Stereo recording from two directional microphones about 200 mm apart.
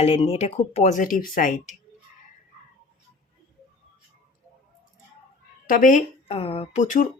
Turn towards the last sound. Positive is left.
turn(degrees=40)  # may be behind; listen again after turning